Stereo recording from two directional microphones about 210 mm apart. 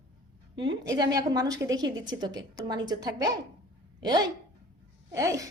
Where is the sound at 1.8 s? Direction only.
65° right (ahead or behind).